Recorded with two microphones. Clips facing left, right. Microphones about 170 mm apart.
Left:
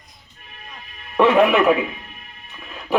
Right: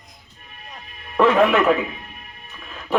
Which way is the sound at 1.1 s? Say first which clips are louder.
Left 1 dB; centre (ahead or behind).